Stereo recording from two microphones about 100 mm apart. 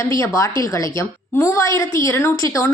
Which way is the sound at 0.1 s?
30° left (ahead or behind).